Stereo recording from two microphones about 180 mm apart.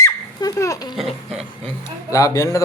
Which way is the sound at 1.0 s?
Centre (ahead or behind).